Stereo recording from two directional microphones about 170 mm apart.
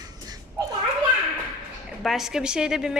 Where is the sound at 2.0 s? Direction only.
Centre (ahead or behind).